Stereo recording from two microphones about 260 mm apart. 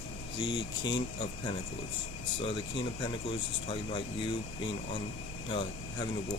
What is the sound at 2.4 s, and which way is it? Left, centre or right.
Speech, centre.